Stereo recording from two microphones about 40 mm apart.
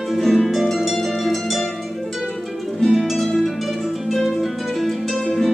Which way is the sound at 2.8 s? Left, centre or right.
Centre.